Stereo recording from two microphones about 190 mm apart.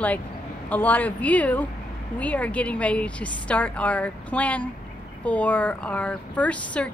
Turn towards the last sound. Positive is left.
turn(degrees=5)  # may be behind; listen again after turning